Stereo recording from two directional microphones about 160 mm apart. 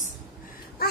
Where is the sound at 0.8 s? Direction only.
70° left (ahead or behind).